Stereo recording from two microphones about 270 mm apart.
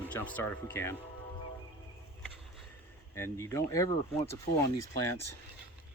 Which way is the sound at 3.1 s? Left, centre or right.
Centre.